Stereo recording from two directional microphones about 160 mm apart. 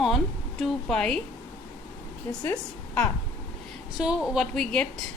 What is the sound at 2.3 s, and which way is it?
Speech, 15° left (ahead or behind).